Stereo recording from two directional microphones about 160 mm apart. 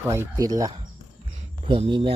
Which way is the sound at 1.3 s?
35° right (ahead or behind).